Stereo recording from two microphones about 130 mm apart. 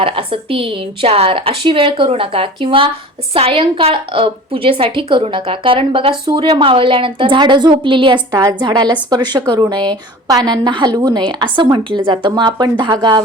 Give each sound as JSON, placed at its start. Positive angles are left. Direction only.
{"t": 0.0, "sound": "a woman's voice", "side_deg": -45}